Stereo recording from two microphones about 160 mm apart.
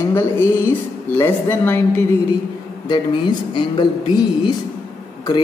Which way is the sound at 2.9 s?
30° left (ahead or behind).